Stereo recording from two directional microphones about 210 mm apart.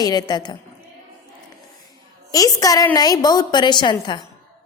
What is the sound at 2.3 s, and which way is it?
A woman's voice, 15° left (ahead or behind).